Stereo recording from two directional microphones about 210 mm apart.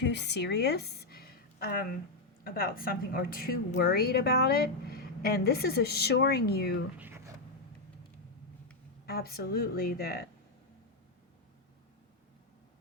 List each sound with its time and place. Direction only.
0.0 s a woman's voice: 55° left (ahead or behind)
7.0 s a sound: 10° right (ahead or behind)
9.0 s speech: 45° left (ahead or behind)